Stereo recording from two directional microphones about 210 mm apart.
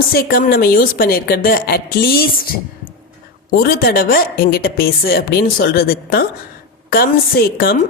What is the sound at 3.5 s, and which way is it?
A woman's voice, 45° left (ahead or behind).